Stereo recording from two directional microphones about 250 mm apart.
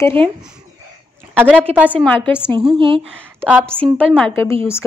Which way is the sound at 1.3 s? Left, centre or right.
Centre.